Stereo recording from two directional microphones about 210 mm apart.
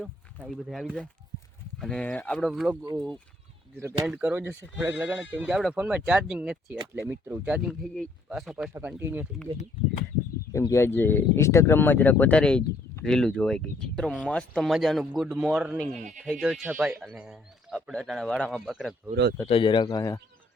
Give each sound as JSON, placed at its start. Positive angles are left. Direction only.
{"t": 0.0, "sound": "speech", "side_deg": 0}
{"t": 3.8, "sound": "speech", "side_deg": -10}
{"t": 10.5, "sound": "speech", "side_deg": 15}
{"t": 19.5, "sound": "a man's voice", "side_deg": 25}